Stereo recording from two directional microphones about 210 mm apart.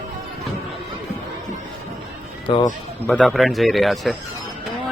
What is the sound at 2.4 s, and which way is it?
Speech, 20° left (ahead or behind).